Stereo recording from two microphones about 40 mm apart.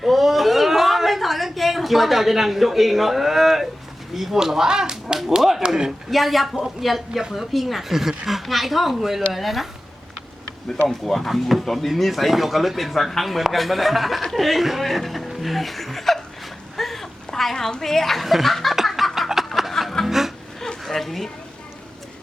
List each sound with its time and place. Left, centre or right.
0.0 s a sound: centre
4.1 s speech: centre
5.6 s speech: centre
6.1 s speech: centre
10.7 s speech: centre
18.5 s a sound: centre
20.1 s music: centre
20.8 s speech: centre